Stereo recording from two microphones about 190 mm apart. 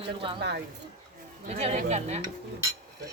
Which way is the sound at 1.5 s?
35° right (ahead or behind).